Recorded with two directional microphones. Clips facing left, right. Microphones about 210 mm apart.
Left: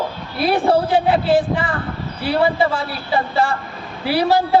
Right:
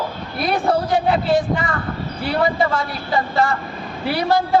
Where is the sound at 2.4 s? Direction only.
30° left (ahead or behind).